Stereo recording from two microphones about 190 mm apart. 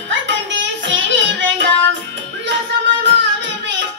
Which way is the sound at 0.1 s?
70° right (ahead or behind).